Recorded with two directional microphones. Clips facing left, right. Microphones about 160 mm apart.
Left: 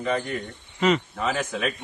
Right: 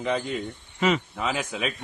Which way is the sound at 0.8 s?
Centre (ahead or behind).